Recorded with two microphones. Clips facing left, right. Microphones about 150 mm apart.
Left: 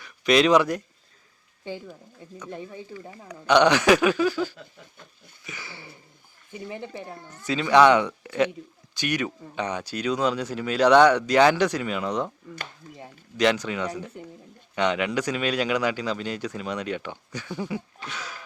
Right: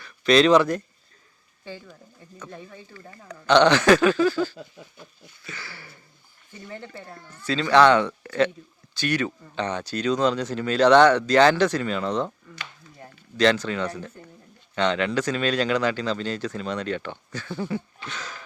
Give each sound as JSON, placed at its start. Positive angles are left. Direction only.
{"t": 0.0, "sound": "a man's voice", "side_deg": 15}